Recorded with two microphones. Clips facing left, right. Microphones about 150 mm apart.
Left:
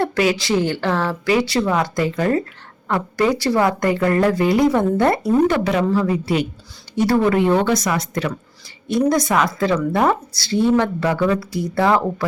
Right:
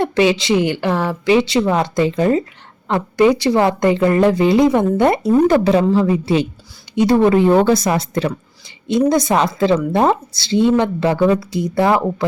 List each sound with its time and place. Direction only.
0.0 s a woman's voice: 25° right (ahead or behind)
5.5 s a woman's voice: 35° right (ahead or behind)
7.2 s a woman's voice: 30° right (ahead or behind); by 12.1 s 15° right (ahead or behind)